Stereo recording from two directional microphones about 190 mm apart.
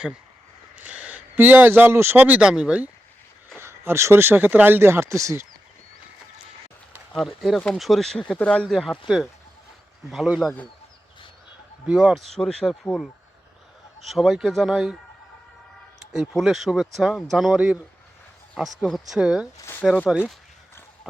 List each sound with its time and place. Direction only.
0.8 s speech: 10° right (ahead or behind)
7.1 s speech: centre (ahead or behind)
11.9 s speech: 5° right (ahead or behind)
14.1 s speech: centre (ahead or behind)
16.1 s speech: centre (ahead or behind)
19.6 s a sound: 10° left (ahead or behind)
19.9 s speech: centre (ahead or behind)